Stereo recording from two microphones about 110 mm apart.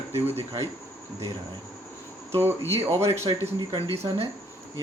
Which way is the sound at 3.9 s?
65° right (ahead or behind).